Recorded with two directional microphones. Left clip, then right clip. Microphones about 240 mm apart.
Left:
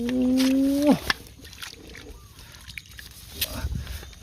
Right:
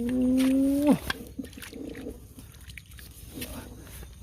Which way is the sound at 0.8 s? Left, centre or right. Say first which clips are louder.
Left 4 dB; centre.